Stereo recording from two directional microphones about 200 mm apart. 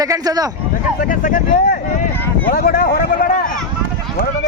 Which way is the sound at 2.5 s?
45° left (ahead or behind).